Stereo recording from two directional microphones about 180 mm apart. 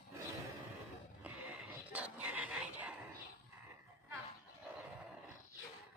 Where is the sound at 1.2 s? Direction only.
5° right (ahead or behind).